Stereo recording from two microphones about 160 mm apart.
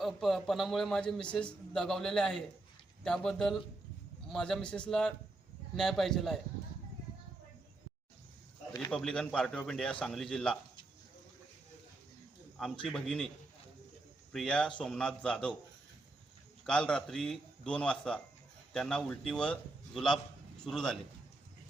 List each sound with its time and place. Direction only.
0.0 s a man's voice: centre (ahead or behind)
8.9 s a man's voice: 5° left (ahead or behind)
12.8 s a man's voice: 5° left (ahead or behind)
14.3 s a man's voice: 5° left (ahead or behind)
16.6 s a man's voice: 5° left (ahead or behind)